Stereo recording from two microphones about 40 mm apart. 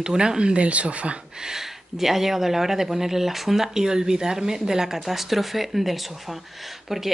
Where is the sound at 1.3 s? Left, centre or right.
Centre.